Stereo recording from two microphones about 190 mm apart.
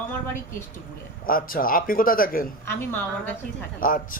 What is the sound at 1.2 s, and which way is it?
A man's voice, 50° left (ahead or behind).